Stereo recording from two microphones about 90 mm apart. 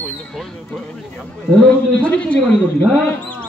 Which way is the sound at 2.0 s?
15° left (ahead or behind).